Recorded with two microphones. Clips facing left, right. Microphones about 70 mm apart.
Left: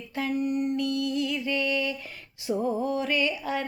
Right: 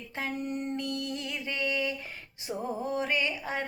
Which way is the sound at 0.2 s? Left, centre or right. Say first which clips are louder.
Left 7 dB; right.